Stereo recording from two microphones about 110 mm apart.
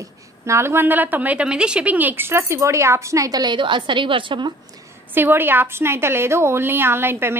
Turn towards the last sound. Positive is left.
turn(degrees=-20)  # may be behind; listen again after turning